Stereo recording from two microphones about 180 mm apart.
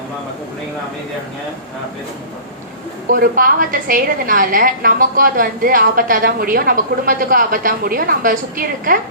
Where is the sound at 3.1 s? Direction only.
55° right (ahead or behind).